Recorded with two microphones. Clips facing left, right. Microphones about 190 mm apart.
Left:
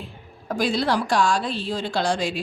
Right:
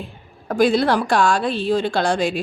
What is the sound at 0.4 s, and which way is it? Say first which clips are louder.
Speech: right 6 dB; 55° right (ahead or behind).